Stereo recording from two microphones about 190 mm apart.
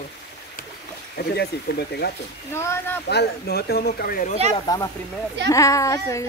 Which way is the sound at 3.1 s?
60° left (ahead or behind).